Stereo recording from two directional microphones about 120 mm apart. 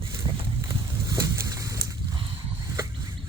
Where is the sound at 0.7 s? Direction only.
30° right (ahead or behind).